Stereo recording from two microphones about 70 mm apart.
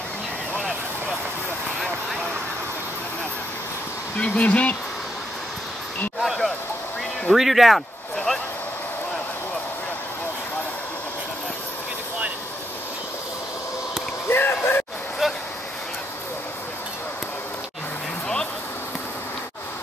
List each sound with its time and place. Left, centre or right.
4.2 s speech: centre
6.2 s speech: centre
14.2 s a sound: left